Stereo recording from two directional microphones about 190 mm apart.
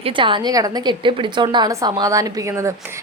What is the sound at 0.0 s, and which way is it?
A woman's voice, 25° right (ahead or behind).